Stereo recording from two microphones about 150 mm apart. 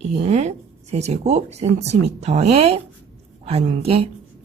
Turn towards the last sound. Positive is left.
turn(degrees=-40)  # may be behind; listen again after turning